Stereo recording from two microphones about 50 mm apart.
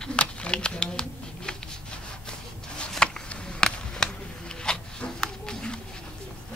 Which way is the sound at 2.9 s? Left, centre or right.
Centre.